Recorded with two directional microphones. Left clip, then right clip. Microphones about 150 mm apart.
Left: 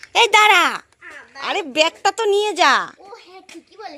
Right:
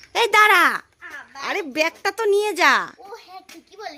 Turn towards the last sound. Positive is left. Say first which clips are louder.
# even
turn(degrees=-20)  # may be behind; listen again after turning